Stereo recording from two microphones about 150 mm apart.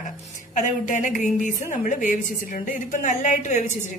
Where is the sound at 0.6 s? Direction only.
60° left (ahead or behind).